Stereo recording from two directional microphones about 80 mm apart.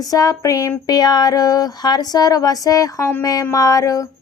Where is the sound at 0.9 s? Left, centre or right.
Left.